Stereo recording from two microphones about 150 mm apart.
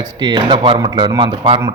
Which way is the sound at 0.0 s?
25° right (ahead or behind).